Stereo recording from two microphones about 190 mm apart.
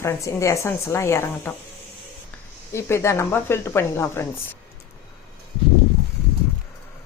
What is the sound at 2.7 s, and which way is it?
Speech, 15° left (ahead or behind).